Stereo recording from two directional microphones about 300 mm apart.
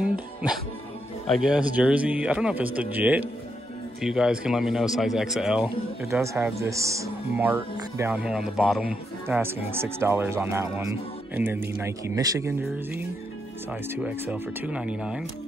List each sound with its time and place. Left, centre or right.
1.3 s a man's voice: centre